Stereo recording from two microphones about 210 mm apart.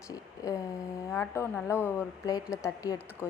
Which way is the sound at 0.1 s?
15° left (ahead or behind).